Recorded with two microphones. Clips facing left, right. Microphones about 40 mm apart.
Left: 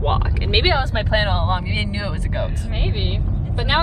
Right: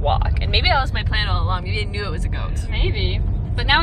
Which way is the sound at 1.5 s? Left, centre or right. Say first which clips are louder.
Left 2 dB; left.